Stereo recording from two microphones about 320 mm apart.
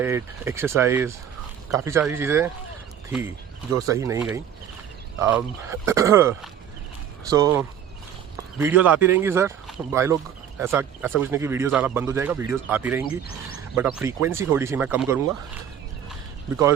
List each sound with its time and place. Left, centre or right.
0.0 s speech: centre
3.8 s speech: centre
13.1 s speech: left
13.7 s speech: centre